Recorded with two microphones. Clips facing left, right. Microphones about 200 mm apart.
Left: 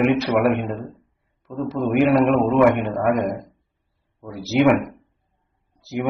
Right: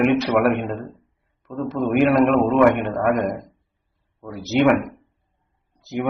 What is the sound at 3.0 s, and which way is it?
A man's voice, 10° left (ahead or behind).